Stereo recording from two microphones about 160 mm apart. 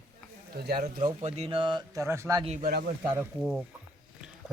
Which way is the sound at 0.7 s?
60° right (ahead or behind).